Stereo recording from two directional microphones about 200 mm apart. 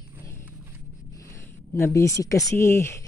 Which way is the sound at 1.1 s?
15° left (ahead or behind).